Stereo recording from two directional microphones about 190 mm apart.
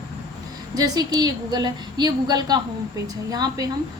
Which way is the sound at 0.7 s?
20° right (ahead or behind).